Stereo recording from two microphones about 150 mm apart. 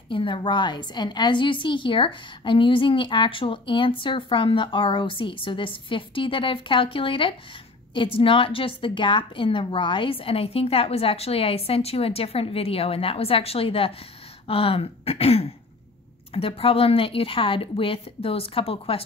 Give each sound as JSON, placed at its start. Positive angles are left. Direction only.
{"t": 0.1, "sound": "a woman's voice", "side_deg": 35}